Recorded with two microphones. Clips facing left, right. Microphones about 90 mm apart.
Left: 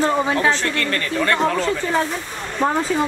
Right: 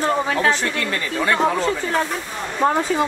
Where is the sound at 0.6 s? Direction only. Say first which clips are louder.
Left 1 dB; 10° right (ahead or behind).